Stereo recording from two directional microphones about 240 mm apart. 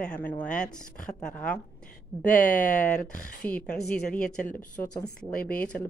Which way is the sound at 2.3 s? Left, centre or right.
Left.